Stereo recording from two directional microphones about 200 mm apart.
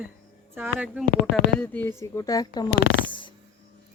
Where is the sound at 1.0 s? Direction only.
60° left (ahead or behind).